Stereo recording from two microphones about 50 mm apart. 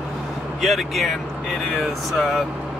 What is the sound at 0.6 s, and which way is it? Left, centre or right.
Speech, centre.